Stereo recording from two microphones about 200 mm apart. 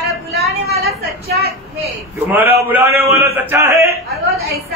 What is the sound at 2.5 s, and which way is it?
A man's voice, 10° right (ahead or behind).